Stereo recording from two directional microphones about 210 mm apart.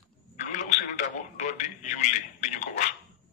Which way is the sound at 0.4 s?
35° left (ahead or behind).